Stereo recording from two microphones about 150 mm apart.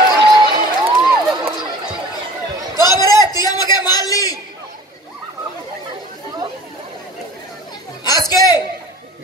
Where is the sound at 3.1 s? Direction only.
25° left (ahead or behind).